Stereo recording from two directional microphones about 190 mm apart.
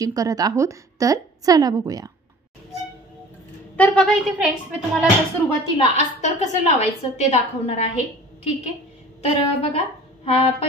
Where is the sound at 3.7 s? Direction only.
5° left (ahead or behind).